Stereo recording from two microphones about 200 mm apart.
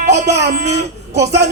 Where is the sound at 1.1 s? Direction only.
60° right (ahead or behind).